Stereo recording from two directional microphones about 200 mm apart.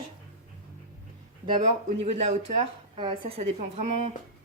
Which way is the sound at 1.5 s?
30° right (ahead or behind).